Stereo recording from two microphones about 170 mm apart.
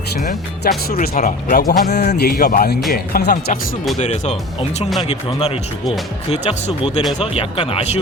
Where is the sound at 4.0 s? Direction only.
40° left (ahead or behind).